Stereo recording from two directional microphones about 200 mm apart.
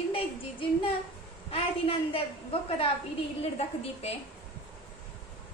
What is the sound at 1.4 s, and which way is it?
A woman's voice, 30° left (ahead or behind).